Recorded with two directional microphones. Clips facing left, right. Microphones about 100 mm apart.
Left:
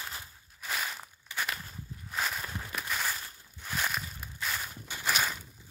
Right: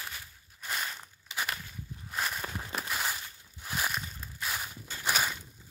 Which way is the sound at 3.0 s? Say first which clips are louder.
Even; 10° right (ahead or behind).